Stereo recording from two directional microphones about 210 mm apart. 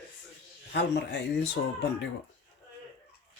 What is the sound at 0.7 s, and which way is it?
Speech, 55° left (ahead or behind).